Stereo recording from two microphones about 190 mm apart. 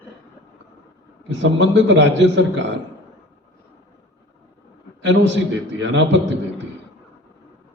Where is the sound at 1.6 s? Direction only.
75° right (ahead or behind).